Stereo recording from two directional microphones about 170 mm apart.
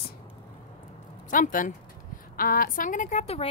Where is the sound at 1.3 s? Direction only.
50° left (ahead or behind); by 3.5 s 35° left (ahead or behind).